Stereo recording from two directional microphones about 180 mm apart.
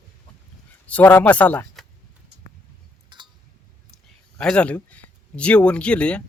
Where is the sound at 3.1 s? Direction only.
25° right (ahead or behind).